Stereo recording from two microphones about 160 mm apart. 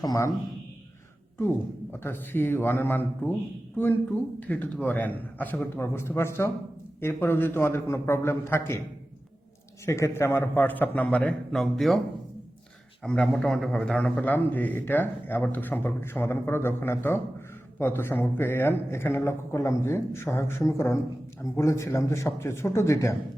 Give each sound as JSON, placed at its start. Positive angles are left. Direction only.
{"t": 0.0, "sound": "a man's voice", "side_deg": 20}
{"t": 1.4, "sound": "a man's voice", "side_deg": 15}
{"t": 4.4, "sound": "a man's voice", "side_deg": 10}
{"t": 9.8, "sound": "a man's voice", "side_deg": 15}
{"t": 13.0, "sound": "a man's voice", "side_deg": 5}